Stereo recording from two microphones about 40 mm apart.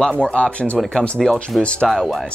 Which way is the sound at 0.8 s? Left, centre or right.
Centre.